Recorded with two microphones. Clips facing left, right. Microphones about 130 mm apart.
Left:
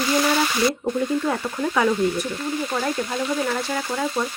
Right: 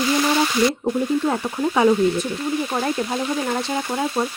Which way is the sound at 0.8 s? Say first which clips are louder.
Right 2 dB; 20° right (ahead or behind).